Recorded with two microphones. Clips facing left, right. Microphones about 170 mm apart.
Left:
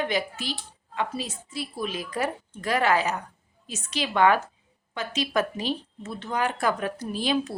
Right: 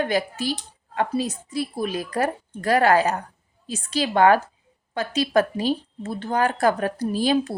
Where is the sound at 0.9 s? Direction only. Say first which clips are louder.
Right 6 dB; 50° right (ahead or behind).